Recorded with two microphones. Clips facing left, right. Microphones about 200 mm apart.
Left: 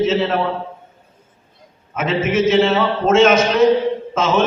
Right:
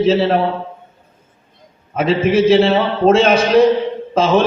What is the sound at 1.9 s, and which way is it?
A man's voice, 35° right (ahead or behind).